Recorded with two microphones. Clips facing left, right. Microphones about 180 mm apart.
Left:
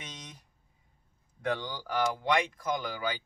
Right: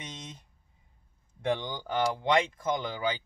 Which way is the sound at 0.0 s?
25° right (ahead or behind).